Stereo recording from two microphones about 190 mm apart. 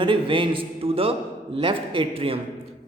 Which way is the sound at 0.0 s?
25° right (ahead or behind).